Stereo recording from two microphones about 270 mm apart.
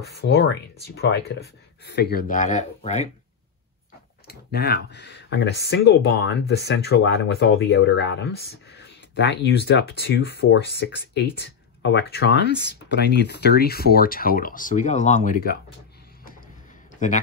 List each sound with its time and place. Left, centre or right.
0.2 s speech: left
4.3 s speech: left